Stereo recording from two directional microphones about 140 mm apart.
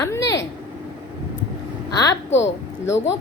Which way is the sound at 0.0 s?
20° left (ahead or behind).